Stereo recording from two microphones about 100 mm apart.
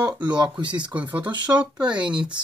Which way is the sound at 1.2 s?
50° right (ahead or behind).